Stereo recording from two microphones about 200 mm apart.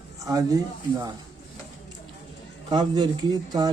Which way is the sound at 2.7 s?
20° right (ahead or behind).